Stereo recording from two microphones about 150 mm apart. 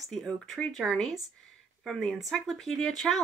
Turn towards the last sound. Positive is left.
turn(degrees=0)  # may be behind; listen again after turning